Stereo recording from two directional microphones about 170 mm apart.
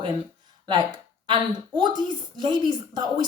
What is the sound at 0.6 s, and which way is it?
A woman's voice, 25° right (ahead or behind).